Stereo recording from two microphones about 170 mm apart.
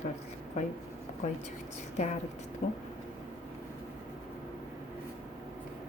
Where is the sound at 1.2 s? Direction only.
45° left (ahead or behind).